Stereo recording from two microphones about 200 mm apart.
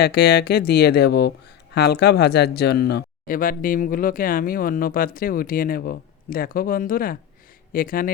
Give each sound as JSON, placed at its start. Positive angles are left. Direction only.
{"t": 0.0, "sound": "speech", "side_deg": 55}